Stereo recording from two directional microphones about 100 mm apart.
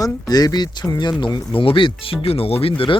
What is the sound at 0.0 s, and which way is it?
Speech, 40° left (ahead or behind).